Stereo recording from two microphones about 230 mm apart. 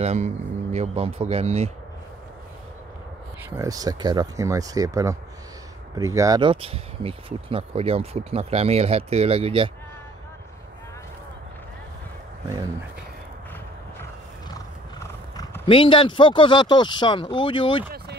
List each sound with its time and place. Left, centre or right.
0.0 s speech: right
3.4 s speech: centre
14.5 s speech: centre